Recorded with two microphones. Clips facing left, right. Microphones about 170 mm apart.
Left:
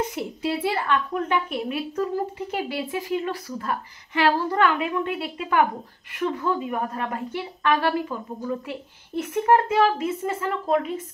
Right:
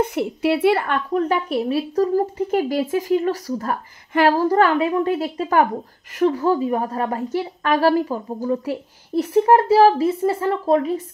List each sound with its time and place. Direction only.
0.0 s a woman's voice: 65° right (ahead or behind)
1.1 s a woman's voice: 35° right (ahead or behind)